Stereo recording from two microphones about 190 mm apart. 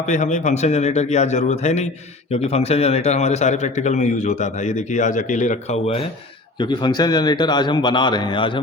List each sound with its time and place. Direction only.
0.0 s a man's voice: 40° left (ahead or behind)